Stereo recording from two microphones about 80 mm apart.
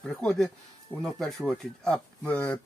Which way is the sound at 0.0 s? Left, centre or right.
Centre.